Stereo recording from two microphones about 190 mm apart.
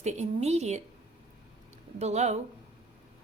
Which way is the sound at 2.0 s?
35° right (ahead or behind).